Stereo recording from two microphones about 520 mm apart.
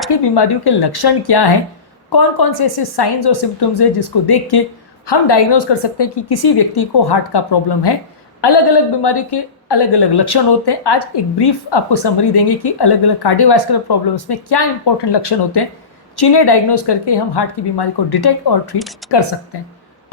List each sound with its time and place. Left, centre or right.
0.1 s a woman's voice: left
18.8 s speech: centre
19.1 s a woman's voice: left